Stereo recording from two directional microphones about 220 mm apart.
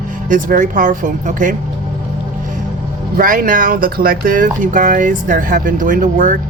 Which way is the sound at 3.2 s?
40° right (ahead or behind).